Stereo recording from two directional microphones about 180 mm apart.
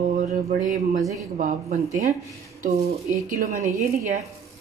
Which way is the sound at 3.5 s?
15° right (ahead or behind).